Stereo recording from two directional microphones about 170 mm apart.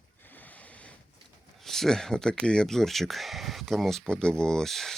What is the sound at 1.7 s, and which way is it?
Speech, 5° left (ahead or behind).